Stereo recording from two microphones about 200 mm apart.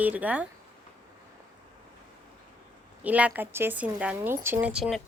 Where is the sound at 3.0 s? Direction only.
5° right (ahead or behind).